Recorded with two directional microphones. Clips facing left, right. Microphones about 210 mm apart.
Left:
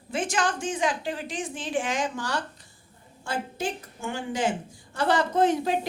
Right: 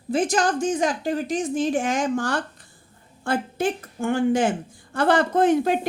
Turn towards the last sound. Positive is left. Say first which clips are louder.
# right 4 dB
turn(degrees=-55)  # may be behind; listen again after turning